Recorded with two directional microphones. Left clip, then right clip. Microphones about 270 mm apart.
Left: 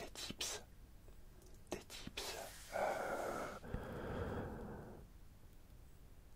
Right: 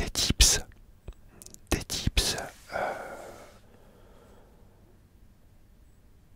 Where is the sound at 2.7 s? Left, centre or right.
Right.